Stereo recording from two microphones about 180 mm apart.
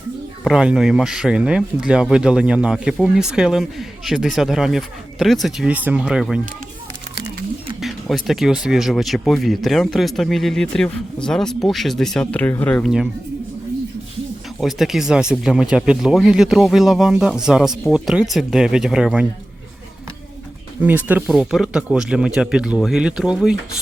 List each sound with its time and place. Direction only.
0.4 s speech: 5° right (ahead or behind)
7.2 s a sound: 65° right (ahead or behind)
7.8 s speech: centre (ahead or behind)
14.6 s speech: centre (ahead or behind)
20.8 s speech: 10° right (ahead or behind)